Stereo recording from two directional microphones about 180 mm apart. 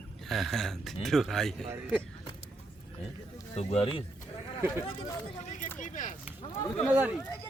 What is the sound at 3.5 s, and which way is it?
Speech, 35° left (ahead or behind).